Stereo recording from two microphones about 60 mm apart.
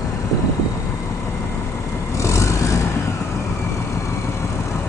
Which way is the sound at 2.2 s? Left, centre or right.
Left.